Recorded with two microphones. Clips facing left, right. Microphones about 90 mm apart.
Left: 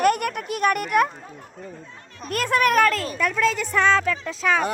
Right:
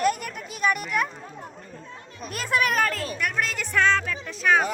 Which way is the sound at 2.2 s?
50° left (ahead or behind).